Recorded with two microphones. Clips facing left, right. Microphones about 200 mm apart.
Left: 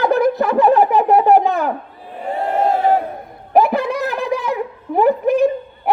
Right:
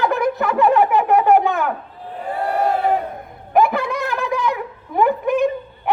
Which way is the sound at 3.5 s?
35° left (ahead or behind).